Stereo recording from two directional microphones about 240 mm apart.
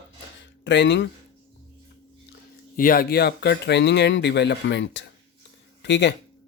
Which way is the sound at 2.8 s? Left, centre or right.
Left.